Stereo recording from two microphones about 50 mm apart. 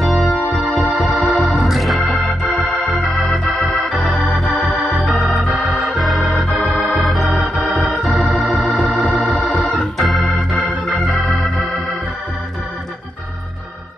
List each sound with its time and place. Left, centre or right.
0.0 s music: centre
1.2 s organ: centre
4.9 s organ: centre
5.7 s organ: right
5.9 s organ: centre
8.6 s organ: left
9.9 s organ: centre